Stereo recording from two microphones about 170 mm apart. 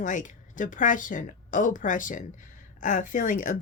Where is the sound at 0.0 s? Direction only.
50° left (ahead or behind).